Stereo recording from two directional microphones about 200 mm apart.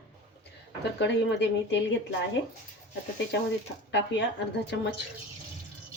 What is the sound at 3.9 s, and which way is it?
Speech, 60° left (ahead or behind).